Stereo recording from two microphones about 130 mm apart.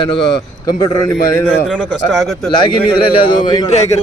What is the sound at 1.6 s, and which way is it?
Speech, 10° left (ahead or behind).